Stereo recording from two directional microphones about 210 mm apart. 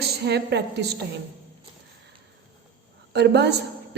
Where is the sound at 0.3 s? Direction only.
50° right (ahead or behind).